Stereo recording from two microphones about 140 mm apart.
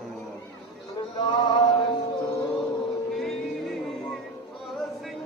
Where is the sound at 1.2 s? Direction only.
30° left (ahead or behind).